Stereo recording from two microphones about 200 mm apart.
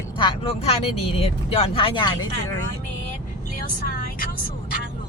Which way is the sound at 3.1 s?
45° left (ahead or behind).